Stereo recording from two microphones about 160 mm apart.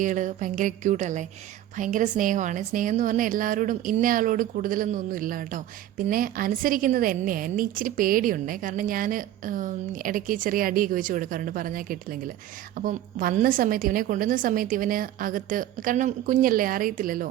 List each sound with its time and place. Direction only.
0.0 s a woman's voice: 50° right (ahead or behind)